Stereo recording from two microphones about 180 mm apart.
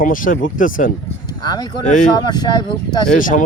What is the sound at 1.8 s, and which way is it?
Speech, 45° left (ahead or behind).